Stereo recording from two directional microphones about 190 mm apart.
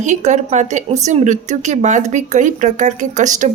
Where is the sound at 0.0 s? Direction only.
40° right (ahead or behind).